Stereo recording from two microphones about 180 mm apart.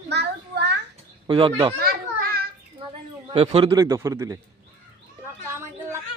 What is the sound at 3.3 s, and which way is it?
Speech, 35° right (ahead or behind).